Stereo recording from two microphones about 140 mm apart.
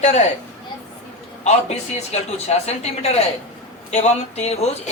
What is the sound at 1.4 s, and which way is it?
Speech, 50° left (ahead or behind).